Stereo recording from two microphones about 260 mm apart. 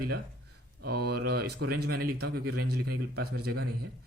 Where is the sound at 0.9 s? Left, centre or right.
Right.